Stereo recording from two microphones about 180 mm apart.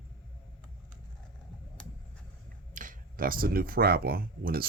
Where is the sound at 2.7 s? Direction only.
50° right (ahead or behind).